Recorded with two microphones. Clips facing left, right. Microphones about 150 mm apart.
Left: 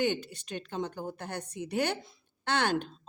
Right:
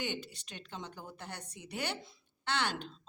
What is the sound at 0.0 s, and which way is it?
A woman's voice, 50° left (ahead or behind).